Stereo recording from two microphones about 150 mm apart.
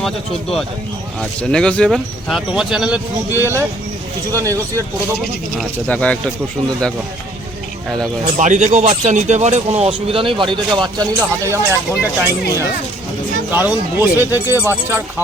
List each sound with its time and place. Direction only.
1.2 s speech: 5° left (ahead or behind)
3.4 s speech: 15° right (ahead or behind)
5.5 s speech: 10° left (ahead or behind)
8.4 s speech: 55° right (ahead or behind); by 11.1 s 30° right (ahead or behind)
11.5 s speech: 15° right (ahead or behind)